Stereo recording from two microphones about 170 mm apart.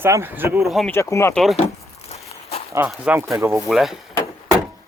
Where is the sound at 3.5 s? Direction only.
Centre (ahead or behind).